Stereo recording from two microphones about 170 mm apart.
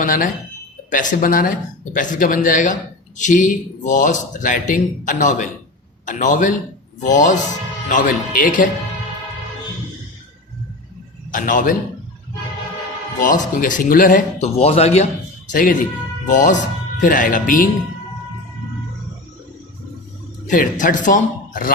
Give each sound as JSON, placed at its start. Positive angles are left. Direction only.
{"t": 0.0, "sound": "speech", "side_deg": 55}
{"t": 11.3, "sound": "speech", "side_deg": 50}
{"t": 13.1, "sound": "speech", "side_deg": 50}
{"t": 15.4, "sound": "speech", "side_deg": 50}
{"t": 20.5, "sound": "speech", "side_deg": 50}